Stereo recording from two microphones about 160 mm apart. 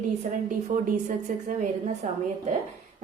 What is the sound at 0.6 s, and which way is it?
A woman's voice, 50° right (ahead or behind).